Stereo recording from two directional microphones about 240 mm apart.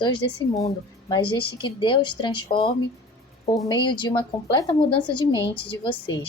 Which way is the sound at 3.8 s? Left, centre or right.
Centre.